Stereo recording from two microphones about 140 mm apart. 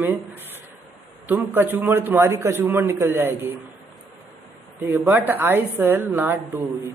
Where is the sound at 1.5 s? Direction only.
15° right (ahead or behind).